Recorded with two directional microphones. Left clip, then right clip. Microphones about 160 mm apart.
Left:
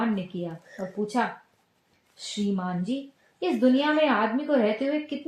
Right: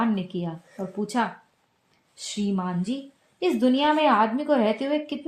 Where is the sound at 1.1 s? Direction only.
45° right (ahead or behind).